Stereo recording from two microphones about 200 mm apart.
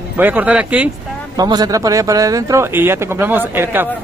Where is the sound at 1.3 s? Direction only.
20° right (ahead or behind).